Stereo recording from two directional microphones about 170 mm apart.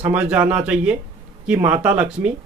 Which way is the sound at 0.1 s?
10° right (ahead or behind).